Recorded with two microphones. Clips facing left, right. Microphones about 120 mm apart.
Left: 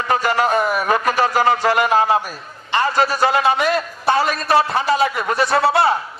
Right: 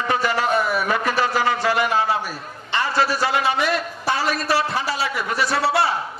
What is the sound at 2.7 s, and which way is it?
Music, 45° left (ahead or behind).